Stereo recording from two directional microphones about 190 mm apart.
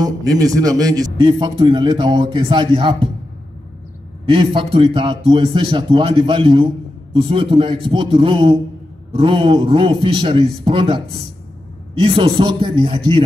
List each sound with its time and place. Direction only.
0.0 s a man's voice: 20° right (ahead or behind)
4.3 s a man's voice: 25° right (ahead or behind)
12.0 s a man's voice: 30° right (ahead or behind)